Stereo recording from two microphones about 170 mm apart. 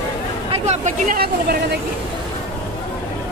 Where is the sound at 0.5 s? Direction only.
40° right (ahead or behind).